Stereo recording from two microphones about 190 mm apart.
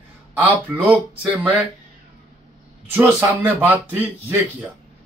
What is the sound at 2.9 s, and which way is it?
A man's voice, 10° right (ahead or behind).